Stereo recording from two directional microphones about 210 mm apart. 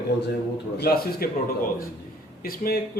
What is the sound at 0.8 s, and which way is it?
Speech, 45° left (ahead or behind).